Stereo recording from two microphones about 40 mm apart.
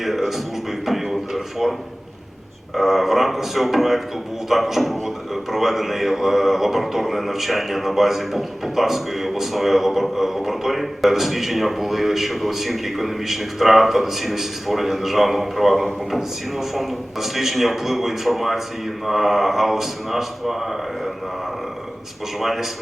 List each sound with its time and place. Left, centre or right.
0.0 s beatboxing: centre
0.9 s a sound: centre
2.7 s a man's voice: centre
22.4 s a man's voice: centre